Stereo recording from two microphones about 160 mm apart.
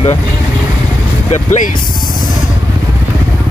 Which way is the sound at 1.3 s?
50° left (ahead or behind).